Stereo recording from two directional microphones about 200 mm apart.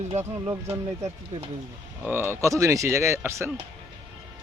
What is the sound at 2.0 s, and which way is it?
Speech, 10° right (ahead or behind).